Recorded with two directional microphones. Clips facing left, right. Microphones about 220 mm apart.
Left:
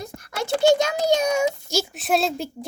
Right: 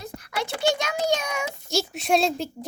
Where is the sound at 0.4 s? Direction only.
45° left (ahead or behind).